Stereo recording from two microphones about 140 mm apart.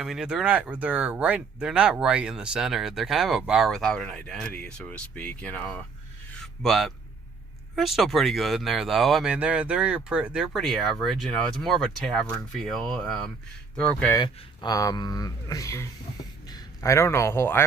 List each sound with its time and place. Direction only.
0.0 s a man's voice: 5° right (ahead or behind)
14.2 s a man's voice: 30° left (ahead or behind)